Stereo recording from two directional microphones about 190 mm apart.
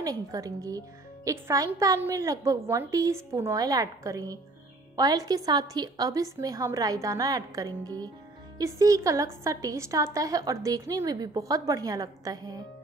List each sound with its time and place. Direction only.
0.0 s a woman's voice: 20° right (ahead or behind)